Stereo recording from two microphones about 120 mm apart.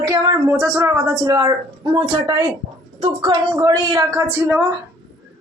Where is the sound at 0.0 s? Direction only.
30° right (ahead or behind).